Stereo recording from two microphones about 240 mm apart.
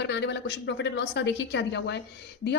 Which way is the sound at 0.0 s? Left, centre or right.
Left.